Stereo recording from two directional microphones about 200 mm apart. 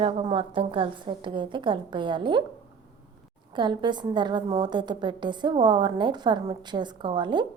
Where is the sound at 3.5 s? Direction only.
20° right (ahead or behind).